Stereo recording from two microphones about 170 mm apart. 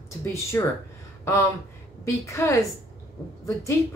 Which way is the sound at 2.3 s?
15° left (ahead or behind).